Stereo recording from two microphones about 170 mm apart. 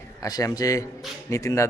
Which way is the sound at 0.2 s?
20° left (ahead or behind).